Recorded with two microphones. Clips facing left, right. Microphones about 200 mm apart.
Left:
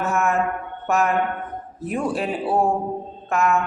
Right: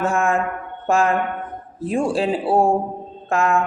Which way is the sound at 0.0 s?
30° right (ahead or behind).